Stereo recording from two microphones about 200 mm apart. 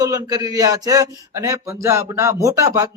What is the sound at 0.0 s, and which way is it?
A man's voice, 20° right (ahead or behind).